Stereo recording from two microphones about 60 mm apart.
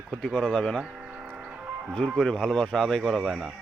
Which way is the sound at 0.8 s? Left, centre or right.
Centre.